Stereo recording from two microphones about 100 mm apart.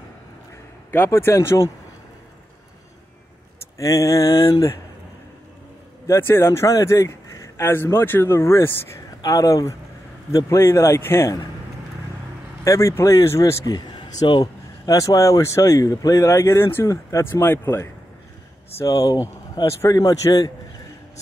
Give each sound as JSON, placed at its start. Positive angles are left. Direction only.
{"t": 0.9, "sound": "a man's voice", "side_deg": 25}
{"t": 3.7, "sound": "speech", "side_deg": 35}
{"t": 6.0, "sound": "a man's voice", "side_deg": 25}
{"t": 12.6, "sound": "a man's voice", "side_deg": 30}
{"t": 13.7, "sound": "speech", "side_deg": 45}
{"t": 14.9, "sound": "a man's voice", "side_deg": 35}
{"t": 18.8, "sound": "speech", "side_deg": 35}